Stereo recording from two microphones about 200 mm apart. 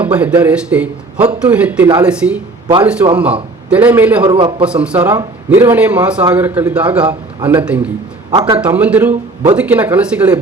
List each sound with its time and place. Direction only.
0.0 s a man's voice: 5° right (ahead or behind)
4.2 s a man's voice: 20° right (ahead or behind)
4.6 s a man's voice: 5° right (ahead or behind)
8.3 s a sound: 20° right (ahead or behind)
8.5 s a man's voice: 5° right (ahead or behind)